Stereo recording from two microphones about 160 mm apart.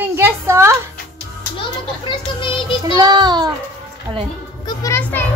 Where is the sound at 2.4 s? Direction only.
30° left (ahead or behind).